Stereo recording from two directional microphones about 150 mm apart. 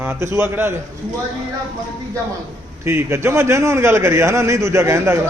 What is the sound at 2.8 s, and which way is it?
A man's voice, 15° right (ahead or behind).